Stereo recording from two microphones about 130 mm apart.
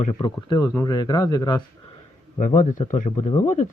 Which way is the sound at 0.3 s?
35° left (ahead or behind).